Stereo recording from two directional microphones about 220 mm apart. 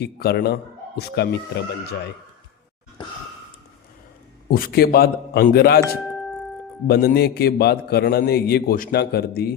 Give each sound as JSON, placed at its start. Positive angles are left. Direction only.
{"t": 0.0, "sound": "a man's voice", "side_deg": 45}
{"t": 3.0, "sound": "sigh", "side_deg": 20}
{"t": 4.4, "sound": "a man's voice", "side_deg": 45}